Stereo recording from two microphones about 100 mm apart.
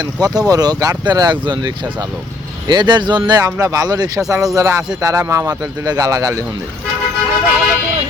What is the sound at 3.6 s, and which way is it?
Speech, 35° right (ahead or behind).